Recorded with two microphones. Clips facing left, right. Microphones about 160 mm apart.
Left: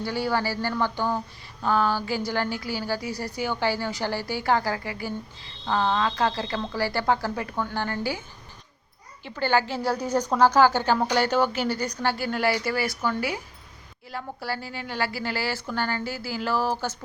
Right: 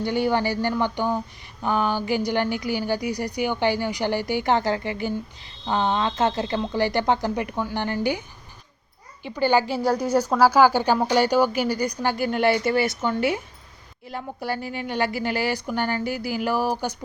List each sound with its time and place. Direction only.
0.0 s a woman's voice: 20° right (ahead or behind)
9.2 s a woman's voice: 15° right (ahead or behind)